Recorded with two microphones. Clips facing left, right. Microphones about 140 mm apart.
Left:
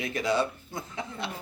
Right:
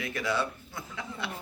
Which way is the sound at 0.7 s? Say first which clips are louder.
Left 4 dB; 35° left (ahead or behind).